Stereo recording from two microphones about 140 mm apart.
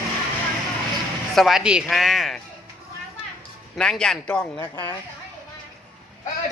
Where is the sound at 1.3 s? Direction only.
Centre (ahead or behind).